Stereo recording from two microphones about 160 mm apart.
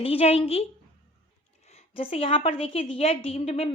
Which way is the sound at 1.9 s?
35° left (ahead or behind).